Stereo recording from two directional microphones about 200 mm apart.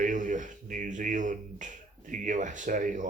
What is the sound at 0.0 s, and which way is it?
Speech, 40° right (ahead or behind).